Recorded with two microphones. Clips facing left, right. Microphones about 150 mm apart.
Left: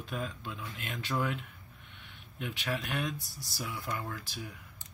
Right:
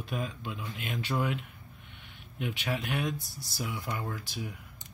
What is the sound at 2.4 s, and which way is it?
Speech, 15° right (ahead or behind).